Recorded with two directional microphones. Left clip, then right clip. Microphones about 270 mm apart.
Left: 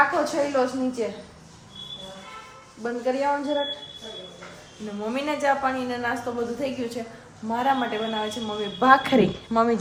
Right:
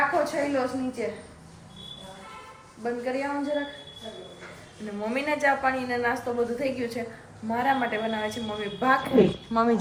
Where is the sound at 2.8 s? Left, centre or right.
Centre.